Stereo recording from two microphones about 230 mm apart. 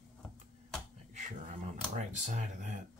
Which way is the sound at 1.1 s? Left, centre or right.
Right.